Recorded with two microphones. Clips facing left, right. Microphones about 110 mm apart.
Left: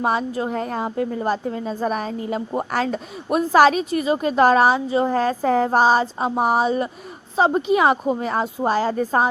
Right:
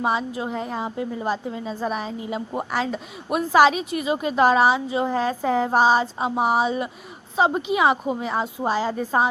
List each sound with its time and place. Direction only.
0.0 s a woman's voice: 45° left (ahead or behind)